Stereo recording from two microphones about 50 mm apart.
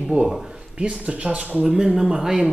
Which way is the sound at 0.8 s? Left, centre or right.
Right.